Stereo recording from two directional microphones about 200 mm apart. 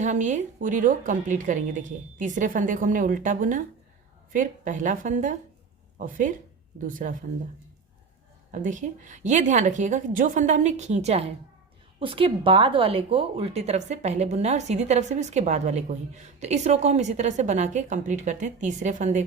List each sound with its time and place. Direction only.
0.0 s speech: 35° right (ahead or behind)
6.7 s speech: 40° right (ahead or behind)
8.6 s speech: 40° right (ahead or behind)